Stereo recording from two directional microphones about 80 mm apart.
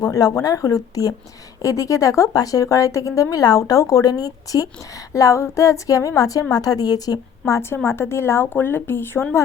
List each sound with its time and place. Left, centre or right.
0.0 s speech: left